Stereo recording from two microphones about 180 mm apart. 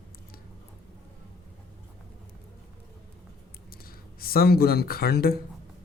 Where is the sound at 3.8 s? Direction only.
55° left (ahead or behind).